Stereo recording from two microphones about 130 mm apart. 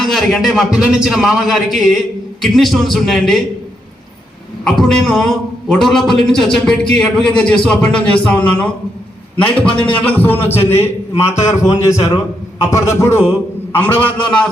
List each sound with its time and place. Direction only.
0.0 s a man's voice: centre (ahead or behind)
4.6 s a man's voice: 5° left (ahead or behind)
9.6 s speech: 40° left (ahead or behind)
10.0 s a man's voice: 10° left (ahead or behind)